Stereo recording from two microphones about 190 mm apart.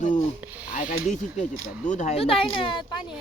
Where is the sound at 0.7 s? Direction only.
40° left (ahead or behind).